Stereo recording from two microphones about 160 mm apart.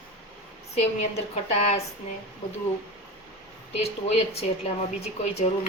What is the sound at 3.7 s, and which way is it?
A woman's voice, 40° left (ahead or behind).